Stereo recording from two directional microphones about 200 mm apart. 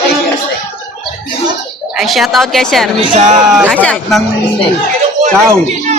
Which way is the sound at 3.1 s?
35° right (ahead or behind).